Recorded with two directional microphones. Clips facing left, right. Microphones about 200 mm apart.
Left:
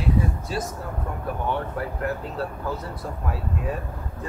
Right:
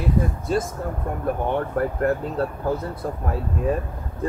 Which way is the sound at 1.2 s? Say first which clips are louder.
Right 5 dB; 50° right (ahead or behind).